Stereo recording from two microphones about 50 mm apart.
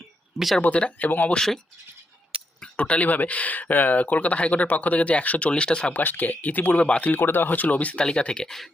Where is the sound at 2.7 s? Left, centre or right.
Left.